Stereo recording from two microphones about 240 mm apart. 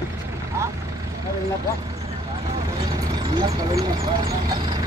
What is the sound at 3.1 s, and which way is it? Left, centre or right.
Speech, centre.